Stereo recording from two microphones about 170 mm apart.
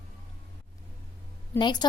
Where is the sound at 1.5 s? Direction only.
25° left (ahead or behind).